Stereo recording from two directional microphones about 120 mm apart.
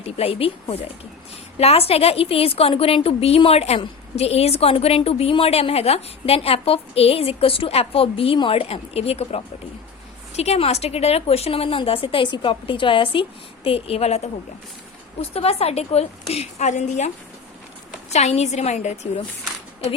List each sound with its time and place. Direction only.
0.0 s a woman's voice: 55° left (ahead or behind)
15.2 s a woman's voice: 55° left (ahead or behind); by 17.1 s 80° left
18.1 s a woman's voice: 65° left (ahead or behind)